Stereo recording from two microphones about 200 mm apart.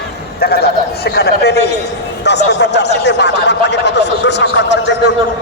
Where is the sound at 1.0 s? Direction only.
55° left (ahead or behind).